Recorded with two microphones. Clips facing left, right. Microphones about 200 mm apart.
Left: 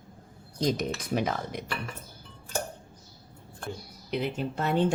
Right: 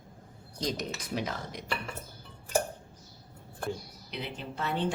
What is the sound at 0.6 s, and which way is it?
A woman's voice, 50° left (ahead or behind).